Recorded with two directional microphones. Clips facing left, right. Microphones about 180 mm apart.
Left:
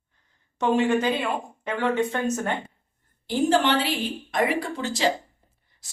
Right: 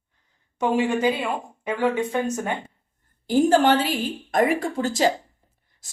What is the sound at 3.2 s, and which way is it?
A woman's voice, 45° right (ahead or behind).